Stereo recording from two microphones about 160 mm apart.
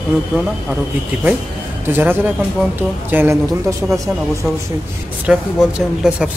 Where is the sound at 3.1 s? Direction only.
15° right (ahead or behind).